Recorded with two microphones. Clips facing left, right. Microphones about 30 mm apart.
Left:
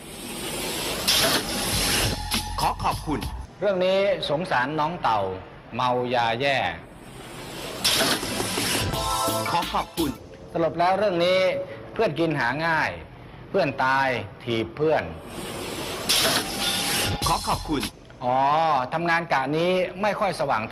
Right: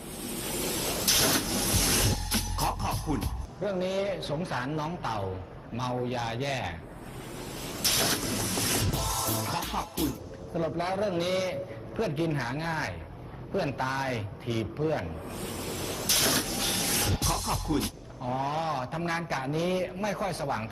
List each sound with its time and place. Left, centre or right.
0.2 s printer: left
7.6 s music: left
10.8 s a man's voice: left
15.4 s printer: left